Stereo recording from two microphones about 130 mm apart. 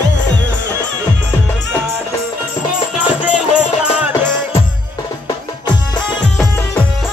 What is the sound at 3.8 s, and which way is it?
Music, 5° right (ahead or behind).